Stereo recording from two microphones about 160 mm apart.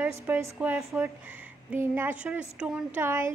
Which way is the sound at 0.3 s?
10° right (ahead or behind).